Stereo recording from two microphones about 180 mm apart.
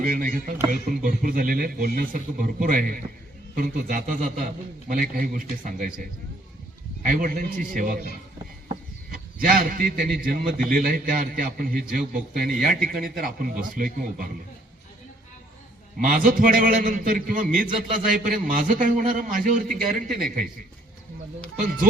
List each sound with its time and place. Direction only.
0.0 s a man's voice: 50° right (ahead or behind)
9.0 s a man's voice: 50° right (ahead or behind)
16.0 s a man's voice: 50° right (ahead or behind)
19.8 s speech: centre (ahead or behind)